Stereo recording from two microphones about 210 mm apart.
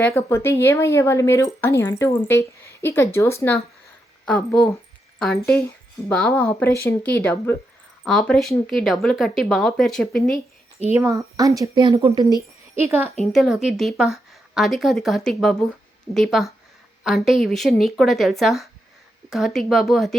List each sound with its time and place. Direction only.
0.0 s a woman's voice: 15° left (ahead or behind)
10.9 s speech: 15° right (ahead or behind)
13.3 s a woman's voice: centre (ahead or behind)